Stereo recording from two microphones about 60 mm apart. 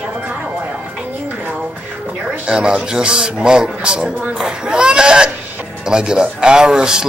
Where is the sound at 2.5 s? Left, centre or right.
Centre.